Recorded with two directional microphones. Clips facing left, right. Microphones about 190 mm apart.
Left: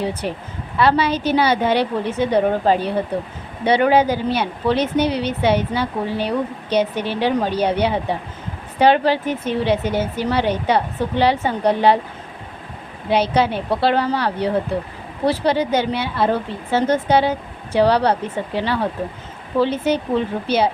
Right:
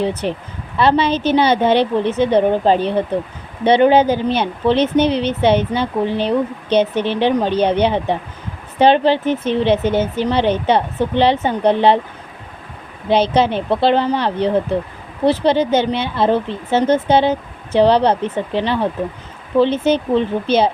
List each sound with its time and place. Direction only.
0.0 s speech: 25° right (ahead or behind)
13.1 s speech: 25° right (ahead or behind)